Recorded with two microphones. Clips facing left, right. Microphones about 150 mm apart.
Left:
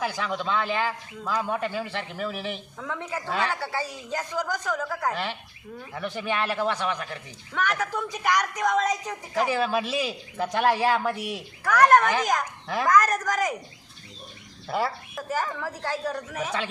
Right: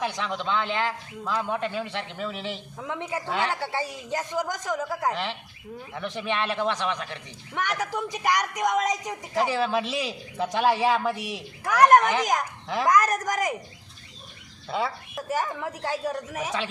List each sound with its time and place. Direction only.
0.0 s a man's voice: 5° left (ahead or behind)
2.8 s speech: 15° right (ahead or behind)
3.2 s a man's voice: centre (ahead or behind)
3.5 s a man's voice: 25° right (ahead or behind)
5.1 s a man's voice: centre (ahead or behind)
7.5 s a man's voice: 20° right (ahead or behind)
9.4 s a man's voice: centre (ahead or behind)
11.6 s speech: 20° right (ahead or behind)
12.6 s a man's voice: centre (ahead or behind)
12.9 s a man's voice: 20° right (ahead or behind)
14.7 s a man's voice: centre (ahead or behind)
15.6 s a man's voice: 20° right (ahead or behind)
16.4 s a man's voice: centre (ahead or behind)